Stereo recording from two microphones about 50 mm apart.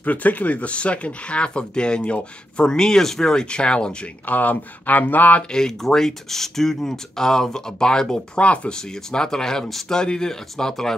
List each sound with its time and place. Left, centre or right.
0.0 s speech: left
4.3 s speech: left
5.5 s speech: centre
8.4 s speech: left
8.7 s speech: centre